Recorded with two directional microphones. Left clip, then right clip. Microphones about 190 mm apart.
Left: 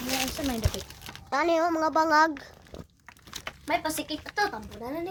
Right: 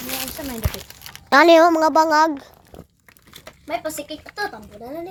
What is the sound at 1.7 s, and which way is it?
Speech, 35° right (ahead or behind).